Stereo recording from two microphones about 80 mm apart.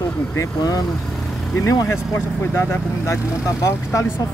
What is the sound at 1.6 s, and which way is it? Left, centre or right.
Speech, left.